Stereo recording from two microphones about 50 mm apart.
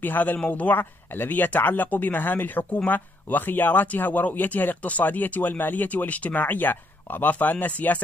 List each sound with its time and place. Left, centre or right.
0.0 s speech: left